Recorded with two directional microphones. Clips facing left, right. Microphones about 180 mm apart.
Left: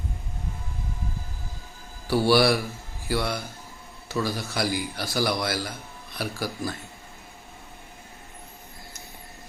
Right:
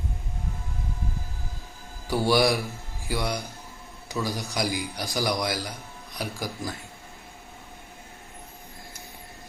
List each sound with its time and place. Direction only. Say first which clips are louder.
2.0 s a man's voice: left 2 dB; 15° right (ahead or behind)